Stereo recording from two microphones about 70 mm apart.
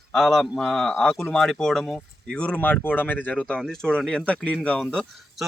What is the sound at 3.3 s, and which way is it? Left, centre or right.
Speech, centre.